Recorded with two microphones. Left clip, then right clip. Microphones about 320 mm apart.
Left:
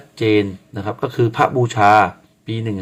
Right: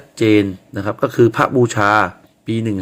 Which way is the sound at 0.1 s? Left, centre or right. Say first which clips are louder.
Right 2 dB; centre.